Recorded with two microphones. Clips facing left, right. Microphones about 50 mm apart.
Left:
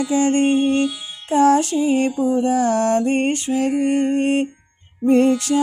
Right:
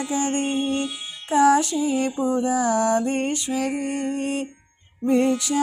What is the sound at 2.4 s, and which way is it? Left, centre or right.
Mantra, left.